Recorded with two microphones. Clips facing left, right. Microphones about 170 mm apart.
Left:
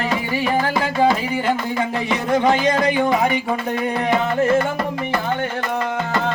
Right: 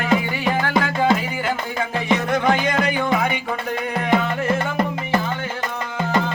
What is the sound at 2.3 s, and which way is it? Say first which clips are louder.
Music: left 6 dB; 30° left (ahead or behind).